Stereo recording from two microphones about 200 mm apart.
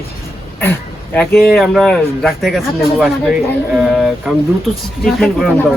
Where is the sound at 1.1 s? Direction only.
5° left (ahead or behind).